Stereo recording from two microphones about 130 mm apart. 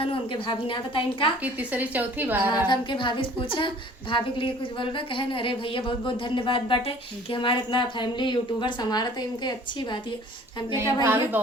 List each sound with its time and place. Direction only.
0.0 s a woman's voice: 40° left (ahead or behind)
1.4 s a woman's voice: 10° right (ahead or behind)
2.6 s a woman's voice: 35° left (ahead or behind)
10.8 s a woman's voice: 20° right (ahead or behind)